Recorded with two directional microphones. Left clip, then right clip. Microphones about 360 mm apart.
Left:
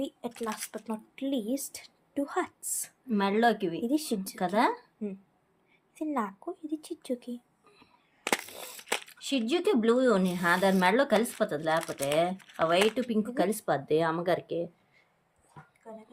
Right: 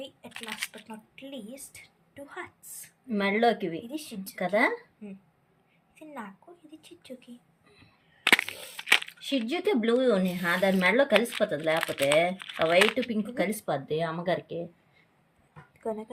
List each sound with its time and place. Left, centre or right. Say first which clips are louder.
0.4 s speech: even; centre
3.1 s speech: right 1 dB; centre
3.9 s speech: left 8 dB; centre
4.4 s speech: right 2 dB; centre
8.6 s speech: right 10 dB; centre